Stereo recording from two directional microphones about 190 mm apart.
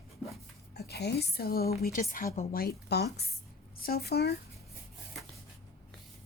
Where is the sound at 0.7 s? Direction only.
60° left (ahead or behind).